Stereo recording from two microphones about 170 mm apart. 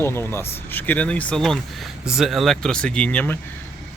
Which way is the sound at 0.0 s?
15° left (ahead or behind).